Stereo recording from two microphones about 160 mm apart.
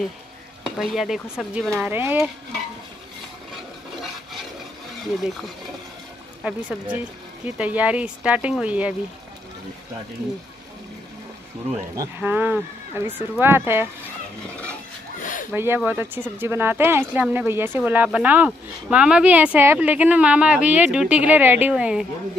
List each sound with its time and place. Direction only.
0.7 s speech: centre (ahead or behind)
1.9 s speech: 15° right (ahead or behind)
6.4 s speech: 5° right (ahead or behind)
12.2 s speech: 10° right (ahead or behind)
15.1 s zipper: 55° left (ahead or behind)
15.5 s speech: 15° right (ahead or behind)